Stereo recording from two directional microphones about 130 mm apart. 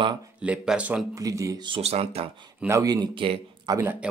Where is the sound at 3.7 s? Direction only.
20° right (ahead or behind).